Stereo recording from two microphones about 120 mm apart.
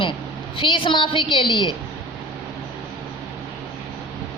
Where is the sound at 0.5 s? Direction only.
45° left (ahead or behind).